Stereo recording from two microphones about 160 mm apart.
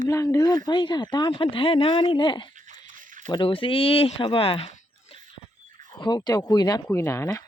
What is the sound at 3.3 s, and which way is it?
Speech, 30° left (ahead or behind).